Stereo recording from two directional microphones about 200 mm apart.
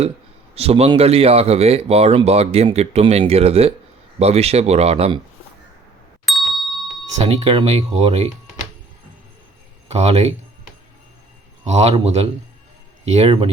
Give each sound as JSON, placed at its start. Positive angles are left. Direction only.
{"t": 0.5, "sound": "speech", "side_deg": -30}
{"t": 6.2, "sound": "ding", "side_deg": 0}
{"t": 7.2, "sound": "speech", "side_deg": -30}
{"t": 9.9, "sound": "speech", "side_deg": -35}
{"t": 11.6, "sound": "speech", "side_deg": -35}